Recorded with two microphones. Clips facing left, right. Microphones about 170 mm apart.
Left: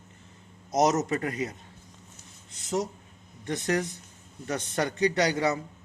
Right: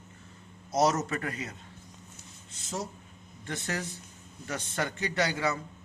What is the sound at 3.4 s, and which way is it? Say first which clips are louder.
Speech: left 7 dB; 20° left (ahead or behind).